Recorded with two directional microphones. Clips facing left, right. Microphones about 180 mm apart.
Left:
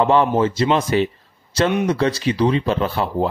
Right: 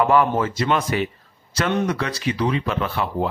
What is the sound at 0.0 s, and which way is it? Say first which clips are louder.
A man's voice: left 2 dB; 25° left (ahead or behind).